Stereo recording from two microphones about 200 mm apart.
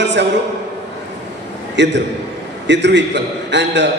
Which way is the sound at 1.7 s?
60° right (ahead or behind).